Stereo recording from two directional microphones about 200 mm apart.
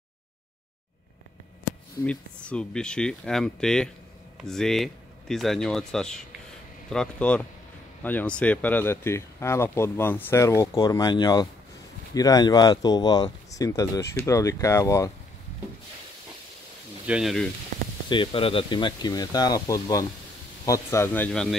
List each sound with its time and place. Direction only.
2.0 s speech: 5° left (ahead or behind)
17.0 s speech: 5° right (ahead or behind)
18.1 s speech: 25° left (ahead or behind); by 21.5 s 5° left (ahead or behind)